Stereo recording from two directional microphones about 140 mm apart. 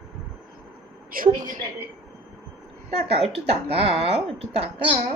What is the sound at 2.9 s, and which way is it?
A woman's voice, 45° right (ahead or behind).